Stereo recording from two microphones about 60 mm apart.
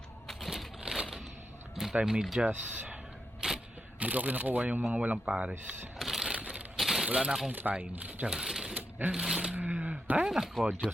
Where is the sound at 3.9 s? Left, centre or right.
Right.